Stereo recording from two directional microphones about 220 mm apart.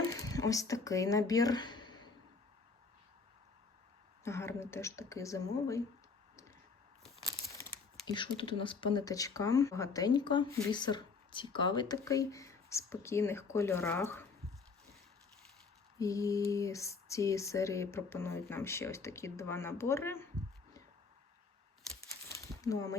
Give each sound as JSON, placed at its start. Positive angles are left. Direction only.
{"t": 0.1, "sound": "speech", "side_deg": 15}
{"t": 4.2, "sound": "speech", "side_deg": 10}
{"t": 7.6, "sound": "a sound", "side_deg": 10}
{"t": 8.0, "sound": "speech", "side_deg": 20}
{"t": 16.0, "sound": "speech", "side_deg": 15}
{"t": 22.4, "sound": "a sound", "side_deg": 15}